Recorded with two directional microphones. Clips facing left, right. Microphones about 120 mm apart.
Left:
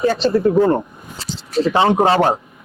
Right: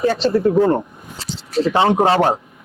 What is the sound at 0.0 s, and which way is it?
Speech, 20° left (ahead or behind).